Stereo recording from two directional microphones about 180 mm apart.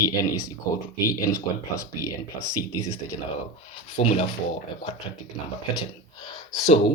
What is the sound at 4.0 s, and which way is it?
Speech, 30° left (ahead or behind).